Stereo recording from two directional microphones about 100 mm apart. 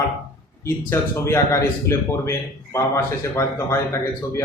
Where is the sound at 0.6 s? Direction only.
25° left (ahead or behind).